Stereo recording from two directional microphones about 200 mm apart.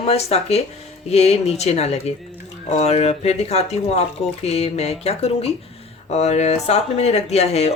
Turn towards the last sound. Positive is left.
turn(degrees=30)  # may be behind; listen again after turning